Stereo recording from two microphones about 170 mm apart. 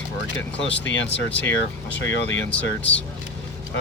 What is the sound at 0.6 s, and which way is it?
Speech, 90° left.